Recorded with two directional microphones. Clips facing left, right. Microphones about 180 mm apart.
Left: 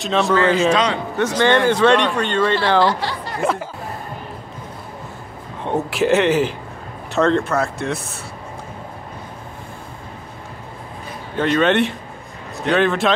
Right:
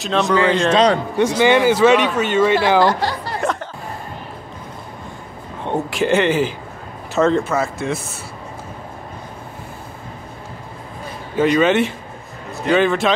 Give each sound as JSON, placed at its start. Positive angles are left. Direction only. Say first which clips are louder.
{"t": 0.0, "sound": "speech", "louder": "even", "side_deg": 0}
{"t": 1.1, "sound": "speech", "louder": "right 2 dB", "side_deg": -10}
{"t": 2.8, "sound": "speech", "louder": "right 2 dB", "side_deg": -45}
{"t": 5.6, "sound": "speech", "louder": "left 1 dB", "side_deg": 0}
{"t": 11.3, "sound": "speech", "louder": "right 2 dB", "side_deg": -5}